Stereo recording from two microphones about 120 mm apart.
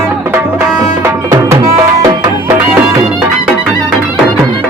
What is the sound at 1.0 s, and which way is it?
Music, 25° right (ahead or behind).